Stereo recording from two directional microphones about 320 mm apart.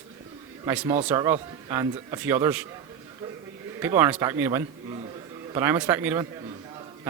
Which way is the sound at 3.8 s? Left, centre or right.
Centre.